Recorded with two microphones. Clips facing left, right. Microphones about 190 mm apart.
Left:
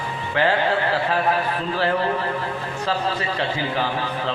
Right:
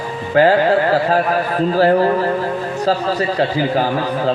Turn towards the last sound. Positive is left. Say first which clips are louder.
# right 7 dB
turn(degrees=-40)  # may be behind; listen again after turning